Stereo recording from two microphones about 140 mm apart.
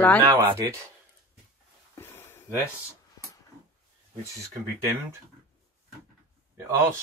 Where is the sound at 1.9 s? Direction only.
15° left (ahead or behind).